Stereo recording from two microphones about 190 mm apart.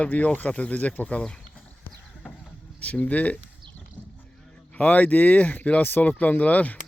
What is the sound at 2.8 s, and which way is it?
Speech, 10° left (ahead or behind).